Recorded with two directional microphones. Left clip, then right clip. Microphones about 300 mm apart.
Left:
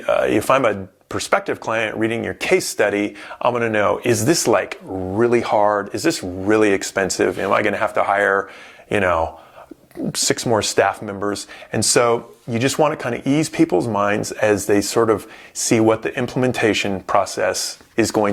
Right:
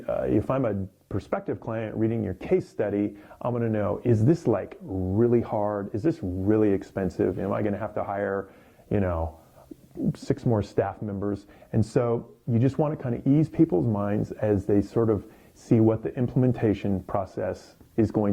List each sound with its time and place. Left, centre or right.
0.0 s speech: centre
4.9 s speech: left
5.2 s speech: centre